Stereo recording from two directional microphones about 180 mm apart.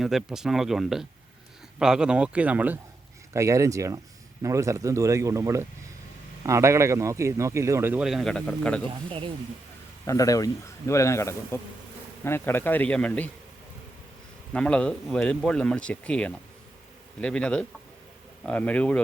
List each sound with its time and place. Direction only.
0.0 s a man's voice: centre (ahead or behind)
8.9 s speech: 30° right (ahead or behind)
10.1 s speech: 20° left (ahead or behind)
14.5 s speech: 5° left (ahead or behind)